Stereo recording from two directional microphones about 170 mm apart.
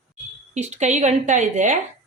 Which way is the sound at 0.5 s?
40° right (ahead or behind).